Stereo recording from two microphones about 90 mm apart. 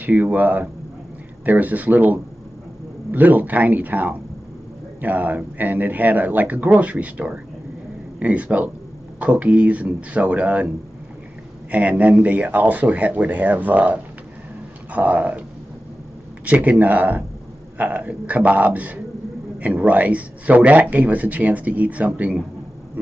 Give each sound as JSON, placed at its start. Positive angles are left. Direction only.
{"t": 0.0, "sound": "a man's voice", "side_deg": -20}
{"t": 11.7, "sound": "a man's voice", "side_deg": -15}
{"t": 16.4, "sound": "a man's voice", "side_deg": -15}